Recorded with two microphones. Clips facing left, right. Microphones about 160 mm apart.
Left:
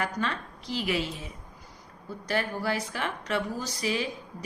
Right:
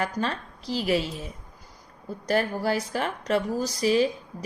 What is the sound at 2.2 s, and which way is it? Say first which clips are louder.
A woman's voice: right 5 dB; 40° right (ahead or behind).